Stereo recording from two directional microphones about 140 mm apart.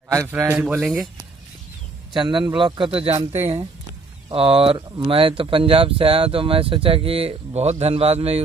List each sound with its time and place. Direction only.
0.1 s a man's voice: 20° right (ahead or behind)
0.6 s speech: 5° right (ahead or behind)
2.2 s speech: 35° right (ahead or behind)